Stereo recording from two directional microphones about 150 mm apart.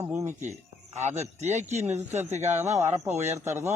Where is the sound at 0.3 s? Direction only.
55° right (ahead or behind).